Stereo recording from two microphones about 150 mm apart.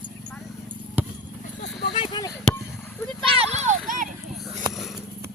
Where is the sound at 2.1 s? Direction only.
25° left (ahead or behind).